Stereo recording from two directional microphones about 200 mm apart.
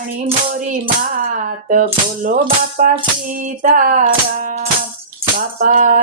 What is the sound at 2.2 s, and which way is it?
Speech, 45° right (ahead or behind).